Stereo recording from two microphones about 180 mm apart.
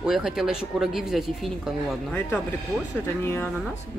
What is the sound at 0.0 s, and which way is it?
Speech, centre (ahead or behind).